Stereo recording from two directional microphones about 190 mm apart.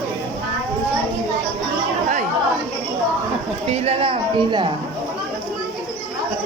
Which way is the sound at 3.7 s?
30° right (ahead or behind).